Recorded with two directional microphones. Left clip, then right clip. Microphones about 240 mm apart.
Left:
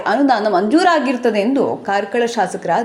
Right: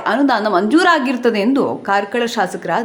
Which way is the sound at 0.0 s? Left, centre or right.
Centre.